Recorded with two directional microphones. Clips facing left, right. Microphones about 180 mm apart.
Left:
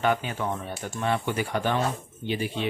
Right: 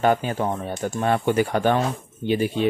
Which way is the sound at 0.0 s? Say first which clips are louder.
Right 5 dB; 40° right (ahead or behind).